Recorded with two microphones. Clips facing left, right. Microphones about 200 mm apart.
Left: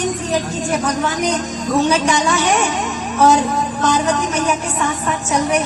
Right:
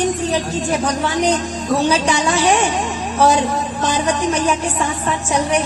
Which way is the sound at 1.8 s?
30° right (ahead or behind).